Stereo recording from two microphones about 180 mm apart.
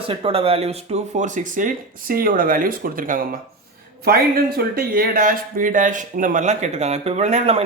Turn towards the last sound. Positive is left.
turn(degrees=-35)  # may be behind; listen again after turning